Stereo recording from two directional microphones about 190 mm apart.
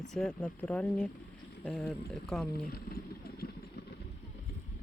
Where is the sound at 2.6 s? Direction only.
50° left (ahead or behind).